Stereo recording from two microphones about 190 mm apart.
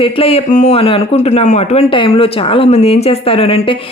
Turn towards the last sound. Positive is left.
turn(degrees=30)  # may be behind; listen again after turning